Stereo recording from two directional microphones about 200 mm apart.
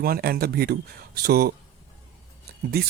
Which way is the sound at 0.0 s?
50° right (ahead or behind).